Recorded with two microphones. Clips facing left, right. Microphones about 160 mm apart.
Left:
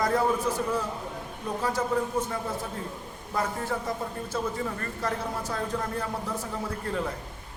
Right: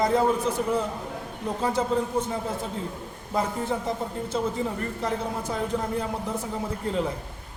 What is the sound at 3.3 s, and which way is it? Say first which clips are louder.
A man's voice: right 3 dB; 20° right (ahead or behind).